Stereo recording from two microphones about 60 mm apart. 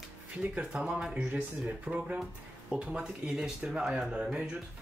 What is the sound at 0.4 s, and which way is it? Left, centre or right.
Speech, centre.